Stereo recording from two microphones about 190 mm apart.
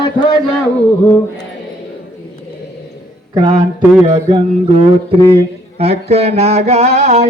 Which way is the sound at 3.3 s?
25° right (ahead or behind).